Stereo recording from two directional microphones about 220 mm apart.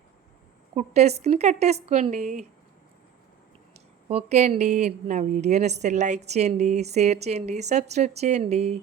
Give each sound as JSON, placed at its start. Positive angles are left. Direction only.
{"t": 0.8, "sound": "speech", "side_deg": -30}
{"t": 4.1, "sound": "a woman's voice", "side_deg": -30}